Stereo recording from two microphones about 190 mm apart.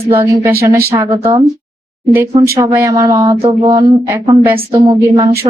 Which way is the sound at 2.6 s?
15° right (ahead or behind).